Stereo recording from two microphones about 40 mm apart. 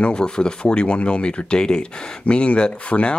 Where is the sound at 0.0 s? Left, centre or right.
Left.